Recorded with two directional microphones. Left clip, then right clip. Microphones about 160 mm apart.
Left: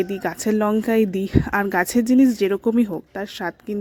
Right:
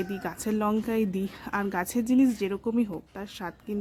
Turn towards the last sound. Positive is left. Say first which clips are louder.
# left 9 dB
turn(degrees=35)  # may be behind; listen again after turning